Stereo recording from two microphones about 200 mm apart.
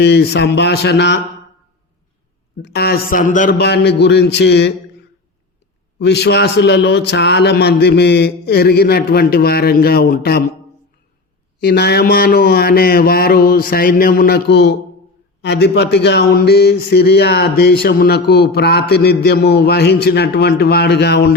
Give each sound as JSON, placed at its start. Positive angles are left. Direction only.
{"t": 0.0, "sound": "speech", "side_deg": 55}
{"t": 2.6, "sound": "mantra", "side_deg": 55}
{"t": 3.6, "sound": "speech", "side_deg": 55}
{"t": 6.0, "sound": "speech", "side_deg": 55}
{"t": 11.6, "sound": "mantra", "side_deg": 55}
{"t": 15.4, "sound": "speech", "side_deg": 55}